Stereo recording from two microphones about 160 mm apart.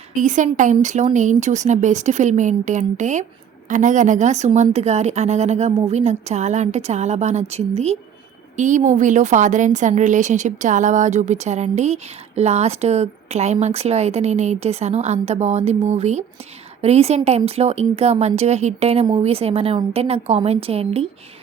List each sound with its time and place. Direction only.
0.2 s a woman's voice: 50° right (ahead or behind)